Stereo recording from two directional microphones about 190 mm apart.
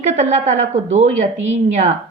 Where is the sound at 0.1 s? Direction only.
40° right (ahead or behind).